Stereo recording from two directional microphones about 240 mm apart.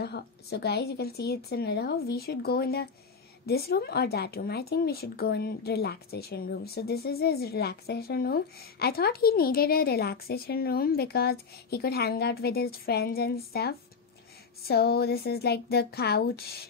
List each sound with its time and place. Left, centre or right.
0.0 s speech: left